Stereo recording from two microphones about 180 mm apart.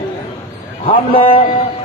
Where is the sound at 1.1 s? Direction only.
30° left (ahead or behind).